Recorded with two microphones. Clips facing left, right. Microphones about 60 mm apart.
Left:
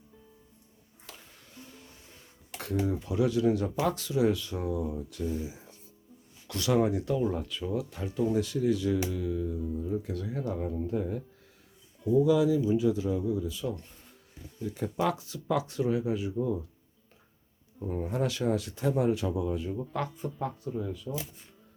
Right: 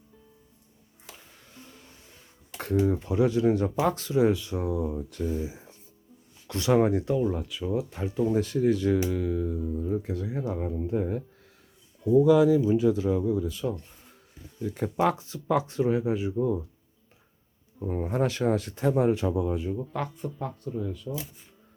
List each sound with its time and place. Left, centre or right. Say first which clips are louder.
2.6 s speech: right 5 dB; right
6.5 s speech: right 4 dB; right
7.2 s speech: right 2 dB; centre
7.7 s speech: right 5 dB; right
8.3 s speech: right 4 dB; right
10.2 s speech: right 2 dB; centre
12.2 s speech: right 5 dB; right
14.8 s speech: right 4 dB; right
17.7 s speech: right 4 dB; right
19.7 s speech: right 2 dB; centre